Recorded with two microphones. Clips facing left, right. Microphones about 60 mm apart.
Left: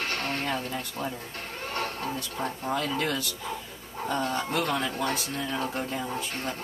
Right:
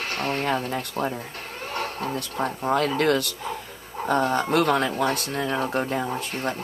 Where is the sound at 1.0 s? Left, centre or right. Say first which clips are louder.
Right 7 dB; right.